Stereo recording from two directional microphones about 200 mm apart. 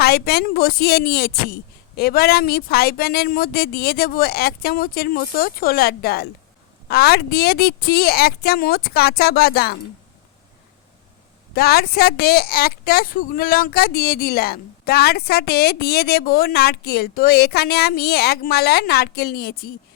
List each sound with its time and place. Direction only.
0.0 s speech: 55° left (ahead or behind)
11.5 s speech: 50° left (ahead or behind)